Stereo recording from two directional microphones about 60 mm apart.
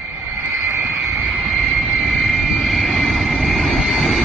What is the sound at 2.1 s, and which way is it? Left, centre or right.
Vehicle, centre.